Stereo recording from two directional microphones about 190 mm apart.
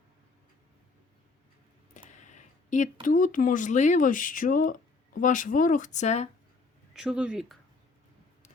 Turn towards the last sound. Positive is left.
turn(degrees=-5)  # may be behind; listen again after turning